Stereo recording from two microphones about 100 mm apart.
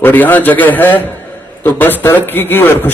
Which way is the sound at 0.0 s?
20° left (ahead or behind).